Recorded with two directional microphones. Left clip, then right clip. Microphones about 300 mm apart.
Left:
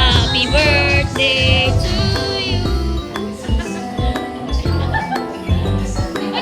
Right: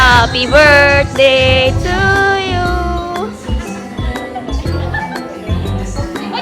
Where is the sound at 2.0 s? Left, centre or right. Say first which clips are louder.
Right 9 dB; right.